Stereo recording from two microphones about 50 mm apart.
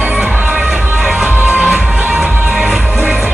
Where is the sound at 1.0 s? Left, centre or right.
Centre.